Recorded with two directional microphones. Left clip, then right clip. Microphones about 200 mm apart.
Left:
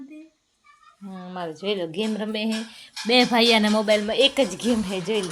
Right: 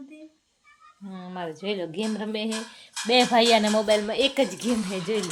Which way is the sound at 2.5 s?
20° right (ahead or behind).